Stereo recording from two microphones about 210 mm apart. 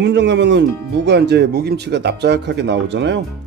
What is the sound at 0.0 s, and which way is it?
Speech, 55° right (ahead or behind).